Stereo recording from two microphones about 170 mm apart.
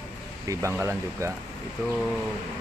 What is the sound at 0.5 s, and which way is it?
Speech, 15° right (ahead or behind).